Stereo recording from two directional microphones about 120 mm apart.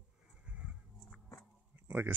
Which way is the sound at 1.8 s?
20° right (ahead or behind).